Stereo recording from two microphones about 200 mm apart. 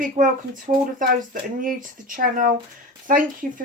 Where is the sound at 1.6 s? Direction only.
40° right (ahead or behind).